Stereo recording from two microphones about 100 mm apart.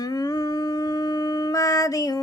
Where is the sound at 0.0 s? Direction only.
40° left (ahead or behind).